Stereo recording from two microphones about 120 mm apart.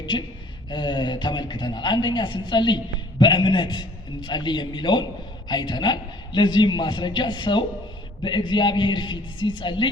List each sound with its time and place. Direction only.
0.0 s a woman's voice: 40° left (ahead or behind)